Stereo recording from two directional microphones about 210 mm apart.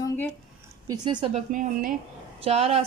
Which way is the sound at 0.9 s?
20° right (ahead or behind).